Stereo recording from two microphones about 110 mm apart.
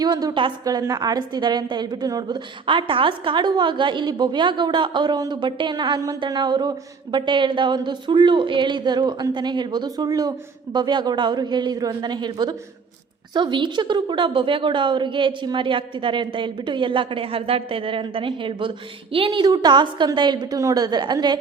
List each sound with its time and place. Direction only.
0.0 s speech: 35° right (ahead or behind)
2.6 s a woman's voice: 50° right (ahead or behind)